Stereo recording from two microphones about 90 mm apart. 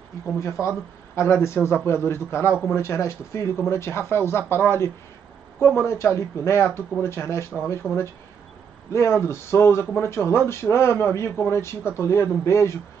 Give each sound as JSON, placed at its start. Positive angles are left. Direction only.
{"t": 0.4, "sound": "speech", "side_deg": 30}
{"t": 8.9, "sound": "speech", "side_deg": 30}